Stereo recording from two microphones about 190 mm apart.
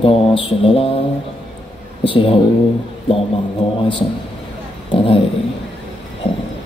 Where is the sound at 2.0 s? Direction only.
30° left (ahead or behind).